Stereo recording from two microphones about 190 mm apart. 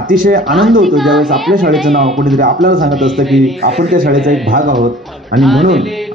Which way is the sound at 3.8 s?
45° right (ahead or behind).